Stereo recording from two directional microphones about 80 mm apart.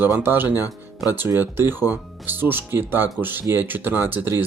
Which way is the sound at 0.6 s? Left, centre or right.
Left.